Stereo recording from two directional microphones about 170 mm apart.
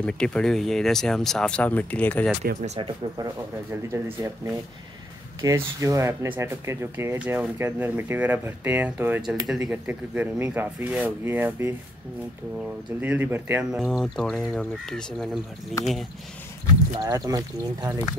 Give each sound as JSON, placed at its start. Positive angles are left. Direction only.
{"t": 0.0, "sound": "speech", "side_deg": 5}
{"t": 2.6, "sound": "speech", "side_deg": -40}
{"t": 3.7, "sound": "speech", "side_deg": -15}
{"t": 13.0, "sound": "speech", "side_deg": -10}
{"t": 17.0, "sound": "speech", "side_deg": -20}